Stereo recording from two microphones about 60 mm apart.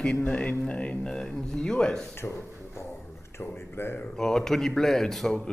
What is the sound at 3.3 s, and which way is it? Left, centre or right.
Speech, left.